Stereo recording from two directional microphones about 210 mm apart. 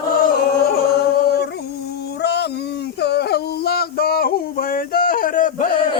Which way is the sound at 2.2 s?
50° left (ahead or behind).